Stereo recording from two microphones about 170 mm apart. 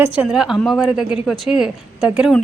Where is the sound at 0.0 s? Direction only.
5° right (ahead or behind).